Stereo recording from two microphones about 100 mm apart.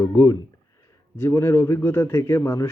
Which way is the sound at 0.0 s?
30° left (ahead or behind).